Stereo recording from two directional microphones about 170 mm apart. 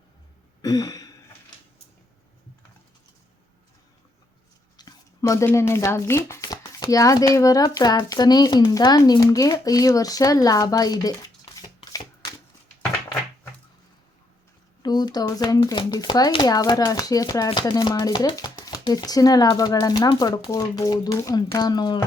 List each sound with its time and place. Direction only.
0.6 s a sound: 20° left (ahead or behind)
4.8 s speech: 20° left (ahead or behind)
11.5 s shuffling cards: 30° left (ahead or behind)
14.8 s speech: 25° left (ahead or behind)